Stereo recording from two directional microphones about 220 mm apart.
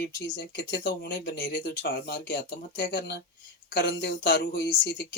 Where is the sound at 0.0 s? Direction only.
50° left (ahead or behind).